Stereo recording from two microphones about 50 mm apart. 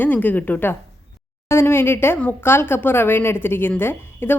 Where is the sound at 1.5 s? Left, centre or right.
Left.